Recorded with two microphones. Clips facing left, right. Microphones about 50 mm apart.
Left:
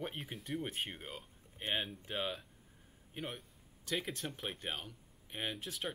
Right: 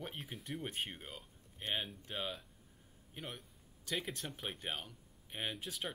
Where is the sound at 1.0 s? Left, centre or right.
Centre.